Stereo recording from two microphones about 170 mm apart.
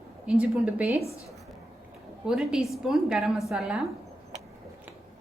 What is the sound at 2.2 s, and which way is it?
A woman's voice, 5° right (ahead or behind).